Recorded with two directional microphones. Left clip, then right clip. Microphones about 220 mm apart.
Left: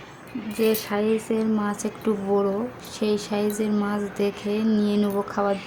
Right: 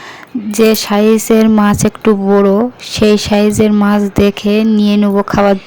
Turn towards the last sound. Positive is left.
turn(degrees=-40)  # may be behind; listen again after turning